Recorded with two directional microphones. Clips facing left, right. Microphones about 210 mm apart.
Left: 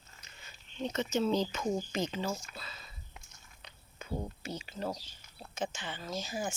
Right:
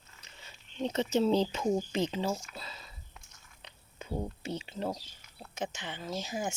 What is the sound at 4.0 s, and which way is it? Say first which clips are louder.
Speech: right 2 dB; 30° right (ahead or behind).